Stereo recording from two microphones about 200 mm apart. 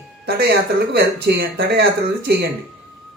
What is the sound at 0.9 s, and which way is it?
Speech, 55° right (ahead or behind).